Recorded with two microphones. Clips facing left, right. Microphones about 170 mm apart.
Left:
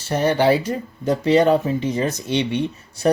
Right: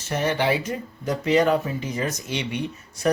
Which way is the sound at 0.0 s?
35° left (ahead or behind).